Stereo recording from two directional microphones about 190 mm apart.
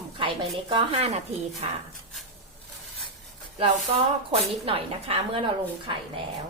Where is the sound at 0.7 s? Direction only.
25° right (ahead or behind).